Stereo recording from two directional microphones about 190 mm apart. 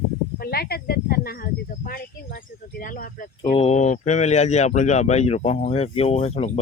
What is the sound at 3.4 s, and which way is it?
A man's voice, 25° left (ahead or behind).